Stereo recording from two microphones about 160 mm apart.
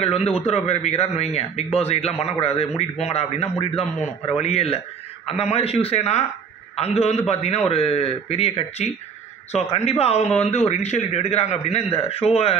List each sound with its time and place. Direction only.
0.0 s a man's voice: 40° left (ahead or behind)